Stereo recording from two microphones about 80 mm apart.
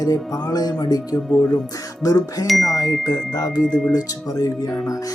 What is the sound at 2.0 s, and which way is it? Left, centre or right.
Music, left.